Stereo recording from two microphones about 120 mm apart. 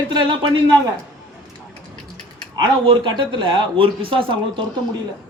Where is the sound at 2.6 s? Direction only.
40° right (ahead or behind).